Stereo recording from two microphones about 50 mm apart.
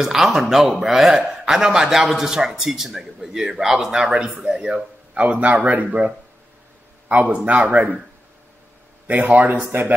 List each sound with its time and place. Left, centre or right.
0.0 s a man's voice: centre; by 7.9 s right
9.0 s speech: right